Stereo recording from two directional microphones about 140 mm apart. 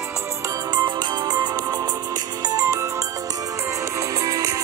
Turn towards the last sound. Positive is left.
turn(degrees=-25)  # may be behind; listen again after turning